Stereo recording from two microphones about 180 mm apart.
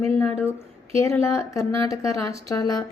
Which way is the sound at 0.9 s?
15° left (ahead or behind).